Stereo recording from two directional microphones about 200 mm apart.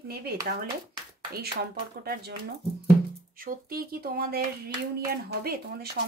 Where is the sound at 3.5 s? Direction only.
50° right (ahead or behind).